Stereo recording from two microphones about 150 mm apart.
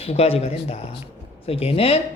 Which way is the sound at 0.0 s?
40° left (ahead or behind).